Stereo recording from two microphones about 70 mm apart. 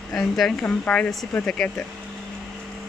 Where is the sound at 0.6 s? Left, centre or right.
Centre.